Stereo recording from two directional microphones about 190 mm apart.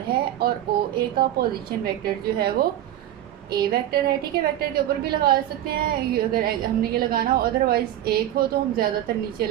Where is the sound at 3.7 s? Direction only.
55° right (ahead or behind).